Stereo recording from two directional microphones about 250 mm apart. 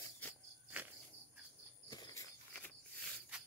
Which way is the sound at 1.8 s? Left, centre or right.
Centre.